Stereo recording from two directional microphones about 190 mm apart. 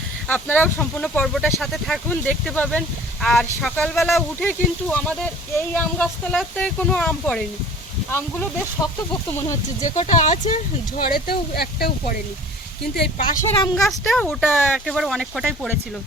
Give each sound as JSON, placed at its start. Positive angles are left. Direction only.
{"t": 0.3, "sound": "speech", "side_deg": 10}
{"t": 9.8, "sound": "speech", "side_deg": 40}
{"t": 12.9, "sound": "speech", "side_deg": 50}
{"t": 13.7, "sound": "speech", "side_deg": 0}